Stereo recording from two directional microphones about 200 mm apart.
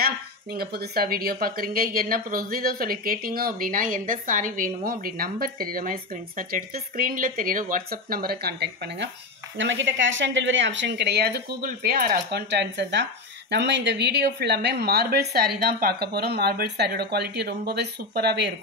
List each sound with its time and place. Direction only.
0.0 s speech: 50° right (ahead or behind)
9.6 s speech: 70° right (ahead or behind)